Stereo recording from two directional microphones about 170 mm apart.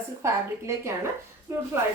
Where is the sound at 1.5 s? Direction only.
15° right (ahead or behind).